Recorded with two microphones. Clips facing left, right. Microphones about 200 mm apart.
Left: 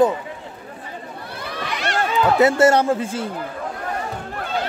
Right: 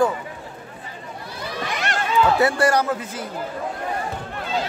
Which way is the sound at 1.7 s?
50° right (ahead or behind).